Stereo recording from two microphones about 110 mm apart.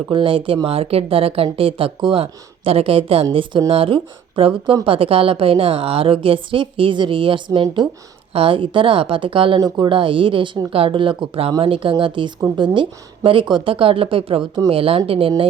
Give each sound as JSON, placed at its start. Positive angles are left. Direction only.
{"t": 0.1, "sound": "a woman's voice", "side_deg": -50}
{"t": 8.3, "sound": "a woman's voice", "side_deg": -55}
{"t": 9.6, "sound": "a woman's voice", "side_deg": -35}